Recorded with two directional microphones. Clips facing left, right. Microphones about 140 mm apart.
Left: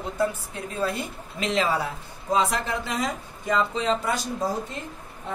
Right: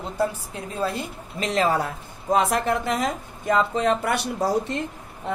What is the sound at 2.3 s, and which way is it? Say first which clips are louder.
A woman's voice: right 3 dB; 55° right (ahead or behind).